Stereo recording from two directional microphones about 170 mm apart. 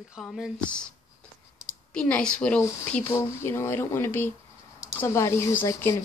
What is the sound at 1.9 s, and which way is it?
Speech, 5° left (ahead or behind).